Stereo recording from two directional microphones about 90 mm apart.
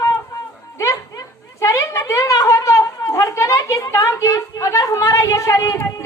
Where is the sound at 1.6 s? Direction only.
35° left (ahead or behind).